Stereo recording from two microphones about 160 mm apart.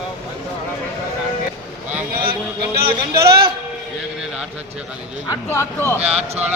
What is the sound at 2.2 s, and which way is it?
Speech, 70° right (ahead or behind).